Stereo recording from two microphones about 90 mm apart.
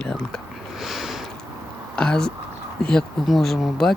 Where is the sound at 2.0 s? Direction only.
10° left (ahead or behind).